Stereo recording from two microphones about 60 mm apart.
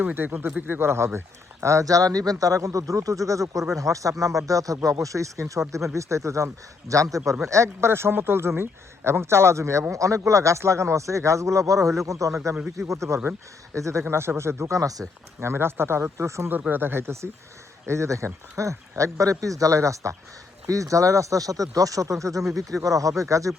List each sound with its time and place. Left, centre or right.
0.0 s speech: right
1.6 s speech: right
7.4 s speech: right
14.1 s speech: right
14.8 s speech: right
15.4 s speech: right
16.5 s speech: right